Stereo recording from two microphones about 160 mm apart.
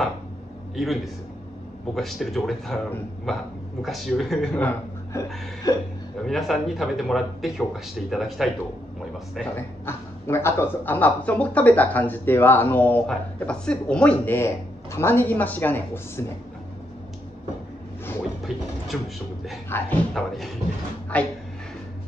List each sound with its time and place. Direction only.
0.7 s speech: centre (ahead or behind)
5.7 s speech: 25° left (ahead or behind)
6.2 s a man's voice: centre (ahead or behind)
18.9 s speech: centre (ahead or behind)
19.7 s a man's voice: 15° left (ahead or behind)
20.2 s a man's voice: centre (ahead or behind)